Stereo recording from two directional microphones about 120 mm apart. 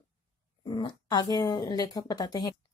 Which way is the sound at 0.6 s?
40° left (ahead or behind).